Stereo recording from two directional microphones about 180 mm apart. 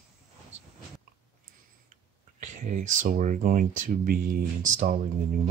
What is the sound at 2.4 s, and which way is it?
Speech, 45° right (ahead or behind).